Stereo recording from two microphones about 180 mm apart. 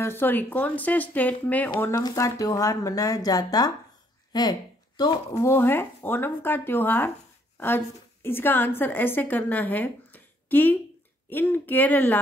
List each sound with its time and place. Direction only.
0.0 s speech: 10° left (ahead or behind)
4.3 s a sound: 20° left (ahead or behind)
5.4 s a woman's voice: 15° left (ahead or behind)